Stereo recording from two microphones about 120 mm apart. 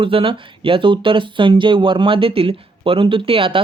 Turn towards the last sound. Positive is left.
turn(degrees=-50)  # may be behind; listen again after turning